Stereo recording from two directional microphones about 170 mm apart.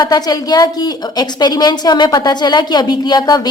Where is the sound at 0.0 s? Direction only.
25° left (ahead or behind).